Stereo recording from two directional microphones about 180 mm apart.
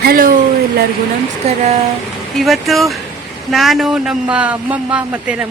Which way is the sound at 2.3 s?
Centre (ahead or behind).